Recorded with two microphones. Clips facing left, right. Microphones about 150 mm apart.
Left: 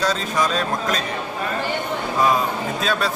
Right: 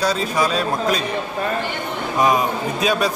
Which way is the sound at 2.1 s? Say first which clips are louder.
Right 2 dB; 15° right (ahead or behind).